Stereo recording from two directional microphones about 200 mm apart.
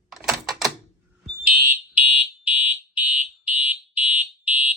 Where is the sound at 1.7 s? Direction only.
5° right (ahead or behind).